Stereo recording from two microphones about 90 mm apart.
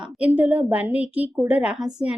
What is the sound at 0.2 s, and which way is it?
A woman's voice, 15° right (ahead or behind).